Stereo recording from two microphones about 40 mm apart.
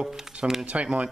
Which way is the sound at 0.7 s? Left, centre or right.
Right.